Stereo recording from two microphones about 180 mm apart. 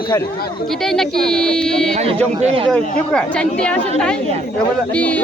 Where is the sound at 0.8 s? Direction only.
5° left (ahead or behind).